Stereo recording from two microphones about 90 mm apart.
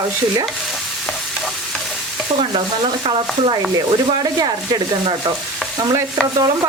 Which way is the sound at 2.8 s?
60° right (ahead or behind).